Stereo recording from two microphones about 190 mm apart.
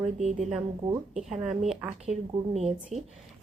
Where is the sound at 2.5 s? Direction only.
35° right (ahead or behind).